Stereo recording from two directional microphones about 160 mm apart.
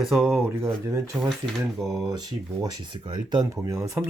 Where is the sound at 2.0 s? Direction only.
25° right (ahead or behind).